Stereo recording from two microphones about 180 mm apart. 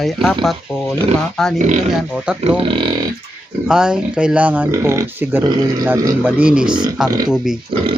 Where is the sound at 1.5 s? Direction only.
40° right (ahead or behind).